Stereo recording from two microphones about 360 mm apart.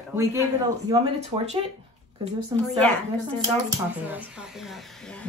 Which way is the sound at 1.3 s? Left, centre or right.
Centre.